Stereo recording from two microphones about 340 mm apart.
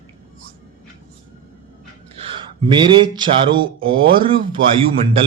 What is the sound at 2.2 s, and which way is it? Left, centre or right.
Speech, centre.